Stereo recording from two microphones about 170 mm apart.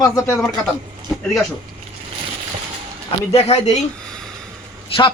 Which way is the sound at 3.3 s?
35° left (ahead or behind).